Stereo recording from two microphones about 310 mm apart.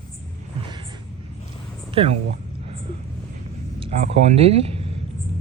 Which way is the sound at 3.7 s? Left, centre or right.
Centre.